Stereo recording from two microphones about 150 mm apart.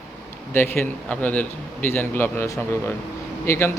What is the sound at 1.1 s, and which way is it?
Speech, 10° left (ahead or behind).